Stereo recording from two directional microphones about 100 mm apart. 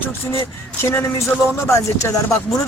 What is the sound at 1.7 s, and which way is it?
Speech, 30° left (ahead or behind).